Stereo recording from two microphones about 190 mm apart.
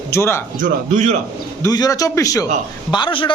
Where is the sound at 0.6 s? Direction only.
40° right (ahead or behind).